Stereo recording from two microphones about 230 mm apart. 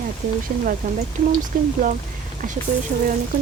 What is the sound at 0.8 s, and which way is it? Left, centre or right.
A woman's voice, right.